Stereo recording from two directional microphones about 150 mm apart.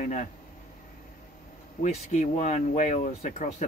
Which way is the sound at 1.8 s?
50° left (ahead or behind).